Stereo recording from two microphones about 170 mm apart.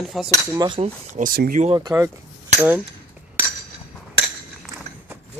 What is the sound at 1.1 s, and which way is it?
Speech, 55° right (ahead or behind).